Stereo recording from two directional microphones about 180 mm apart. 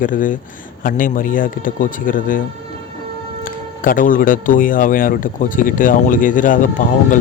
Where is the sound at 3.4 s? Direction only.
50° left (ahead or behind).